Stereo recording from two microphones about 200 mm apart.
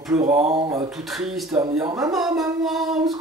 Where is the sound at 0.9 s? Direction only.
Centre (ahead or behind).